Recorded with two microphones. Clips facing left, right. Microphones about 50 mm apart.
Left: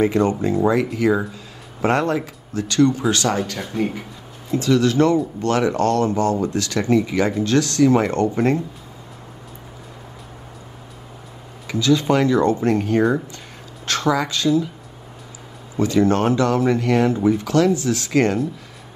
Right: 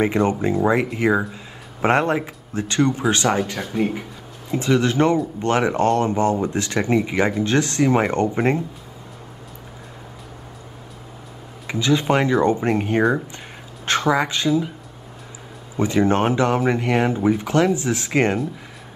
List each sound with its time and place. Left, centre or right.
0.0 s speech: right
3.5 s speech: centre
4.5 s speech: right
11.6 s speech: right
15.8 s speech: right